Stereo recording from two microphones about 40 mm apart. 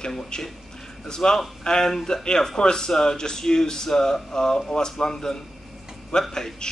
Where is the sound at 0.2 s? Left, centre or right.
Centre.